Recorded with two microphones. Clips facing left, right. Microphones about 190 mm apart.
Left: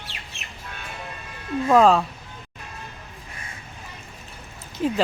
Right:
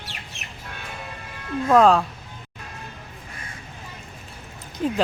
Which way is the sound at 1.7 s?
Centre (ahead or behind).